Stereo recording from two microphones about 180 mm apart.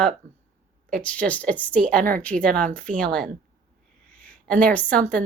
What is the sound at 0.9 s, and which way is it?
A woman's voice, 5° left (ahead or behind).